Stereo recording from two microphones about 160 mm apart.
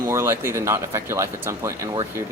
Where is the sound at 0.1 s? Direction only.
15° right (ahead or behind).